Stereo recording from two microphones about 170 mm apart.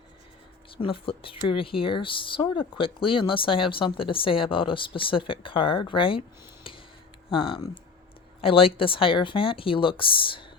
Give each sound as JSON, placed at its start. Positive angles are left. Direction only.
{"t": 0.8, "sound": "speech", "side_deg": 30}
{"t": 7.3, "sound": "speech", "side_deg": 30}